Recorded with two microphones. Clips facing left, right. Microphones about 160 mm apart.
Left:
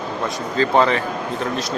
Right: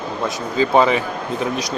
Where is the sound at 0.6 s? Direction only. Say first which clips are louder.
Right 2 dB; 10° right (ahead or behind).